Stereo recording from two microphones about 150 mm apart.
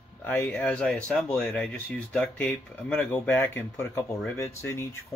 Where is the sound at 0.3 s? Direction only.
10° left (ahead or behind).